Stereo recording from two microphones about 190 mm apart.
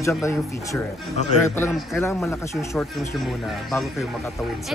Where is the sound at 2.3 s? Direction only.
15° left (ahead or behind).